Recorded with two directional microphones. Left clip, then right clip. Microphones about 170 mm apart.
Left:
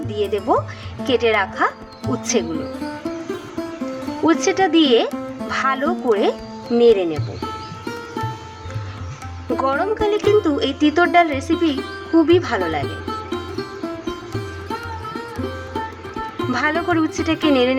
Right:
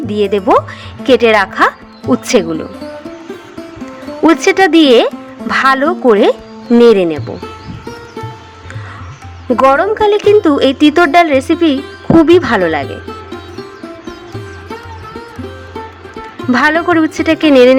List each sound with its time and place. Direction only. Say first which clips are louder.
0.1 s speech: right 9 dB; 45° right (ahead or behind)
4.3 s speech: right 8 dB; 45° right (ahead or behind)
9.6 s speech: right 10 dB; 45° right (ahead or behind)
16.5 s speech: right 10 dB; 45° right (ahead or behind)